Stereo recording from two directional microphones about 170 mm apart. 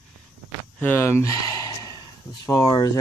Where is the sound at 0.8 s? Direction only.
10° left (ahead or behind).